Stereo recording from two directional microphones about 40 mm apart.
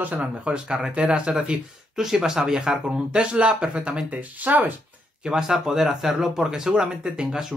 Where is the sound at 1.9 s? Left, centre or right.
Centre; by 4.7 s right.